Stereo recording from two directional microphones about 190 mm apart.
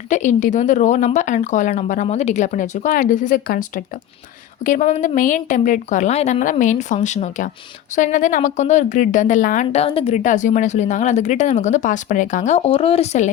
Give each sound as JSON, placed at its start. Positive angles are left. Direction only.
{"t": 0.1, "sound": "speech", "side_deg": 40}
{"t": 9.8, "sound": "speech", "side_deg": 30}